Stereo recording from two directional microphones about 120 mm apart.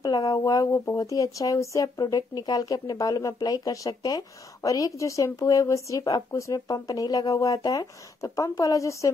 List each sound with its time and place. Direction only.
0.0 s speech: 35° left (ahead or behind)